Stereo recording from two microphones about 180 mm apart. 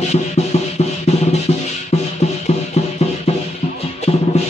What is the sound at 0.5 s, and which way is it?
Music, 40° left (ahead or behind).